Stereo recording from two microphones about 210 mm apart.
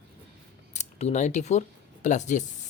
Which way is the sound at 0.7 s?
30° left (ahead or behind).